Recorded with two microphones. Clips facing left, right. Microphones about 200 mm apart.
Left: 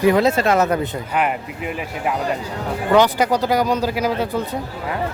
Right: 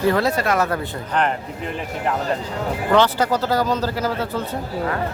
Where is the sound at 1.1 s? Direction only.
10° left (ahead or behind).